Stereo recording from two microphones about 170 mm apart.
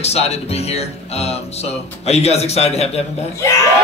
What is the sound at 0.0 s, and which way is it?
Speech, 40° left (ahead or behind).